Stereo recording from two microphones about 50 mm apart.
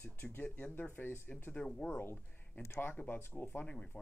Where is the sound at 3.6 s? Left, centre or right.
Centre.